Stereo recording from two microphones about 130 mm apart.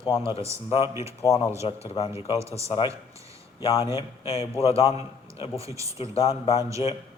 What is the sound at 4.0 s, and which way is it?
Speech, 50° left (ahead or behind).